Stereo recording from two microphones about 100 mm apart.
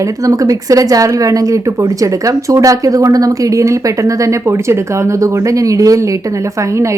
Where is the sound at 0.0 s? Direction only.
35° right (ahead or behind).